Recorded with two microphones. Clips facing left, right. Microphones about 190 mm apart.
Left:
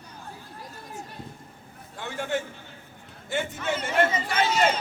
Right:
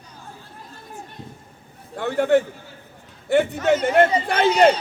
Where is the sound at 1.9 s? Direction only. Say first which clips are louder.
Right 12 dB; 60° right (ahead or behind).